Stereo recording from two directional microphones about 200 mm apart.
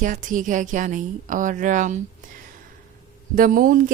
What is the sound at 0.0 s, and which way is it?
Speech, 40° right (ahead or behind).